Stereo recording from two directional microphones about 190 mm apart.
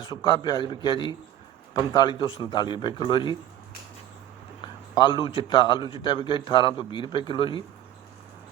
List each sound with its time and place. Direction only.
0.0 s a man's voice: 25° left (ahead or behind)
4.6 s a man's voice: 25° left (ahead or behind)